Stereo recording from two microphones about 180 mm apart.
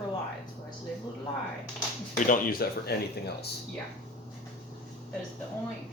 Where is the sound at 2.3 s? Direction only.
55° left (ahead or behind).